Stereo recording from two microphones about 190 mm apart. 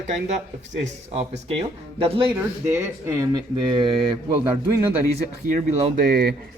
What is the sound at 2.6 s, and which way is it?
Speech, 15° right (ahead or behind).